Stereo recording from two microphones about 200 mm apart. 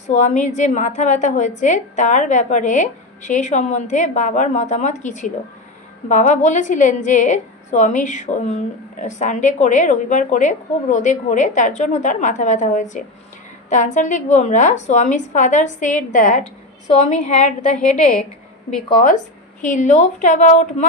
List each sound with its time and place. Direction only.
0.0 s a woman's voice: 35° left (ahead or behind)
19.6 s a woman's voice: 40° left (ahead or behind)